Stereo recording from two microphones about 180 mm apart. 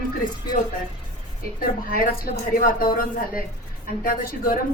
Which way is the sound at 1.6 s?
50° left (ahead or behind).